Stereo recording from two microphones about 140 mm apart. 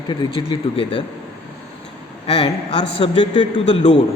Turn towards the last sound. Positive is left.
turn(degrees=50)  # may be behind; listen again after turning